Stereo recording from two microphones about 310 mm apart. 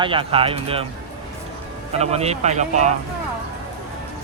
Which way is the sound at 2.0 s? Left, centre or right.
Centre.